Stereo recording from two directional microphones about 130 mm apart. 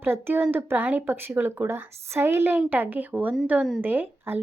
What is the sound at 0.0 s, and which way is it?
A woman's voice, 15° right (ahead or behind).